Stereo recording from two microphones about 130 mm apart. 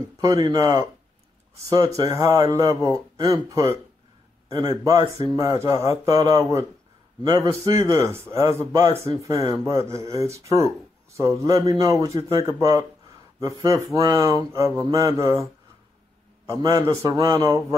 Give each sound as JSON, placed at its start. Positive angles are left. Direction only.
{"t": 0.2, "sound": "a man's voice", "side_deg": -30}
{"t": 2.0, "sound": "a man's voice", "side_deg": -25}
{"t": 16.4, "sound": "a man's voice", "side_deg": -30}